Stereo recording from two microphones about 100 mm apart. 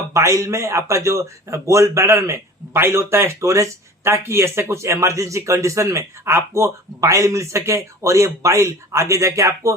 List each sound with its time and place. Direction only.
0.1 s a man's voice: 30° right (ahead or behind)